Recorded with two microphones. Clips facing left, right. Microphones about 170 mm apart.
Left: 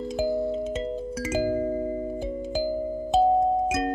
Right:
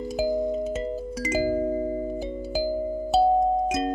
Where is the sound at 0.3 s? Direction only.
15° right (ahead or behind).